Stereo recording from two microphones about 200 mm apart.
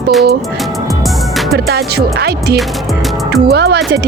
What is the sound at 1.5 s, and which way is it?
Speech, 50° right (ahead or behind).